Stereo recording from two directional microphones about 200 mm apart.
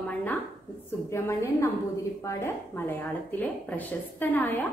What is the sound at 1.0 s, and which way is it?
Speech, 15° left (ahead or behind).